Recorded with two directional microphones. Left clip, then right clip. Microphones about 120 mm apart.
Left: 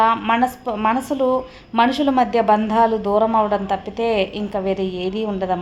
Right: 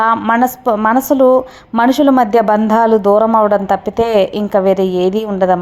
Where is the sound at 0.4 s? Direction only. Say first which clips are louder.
Right 6 dB; 55° right (ahead or behind).